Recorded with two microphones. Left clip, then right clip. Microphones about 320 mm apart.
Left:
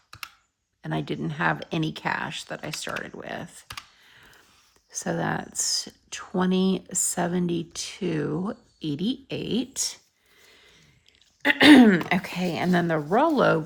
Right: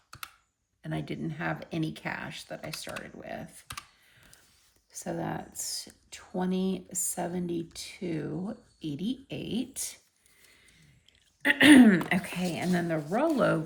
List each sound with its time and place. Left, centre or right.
0.8 s speech: centre
11.4 s speech: centre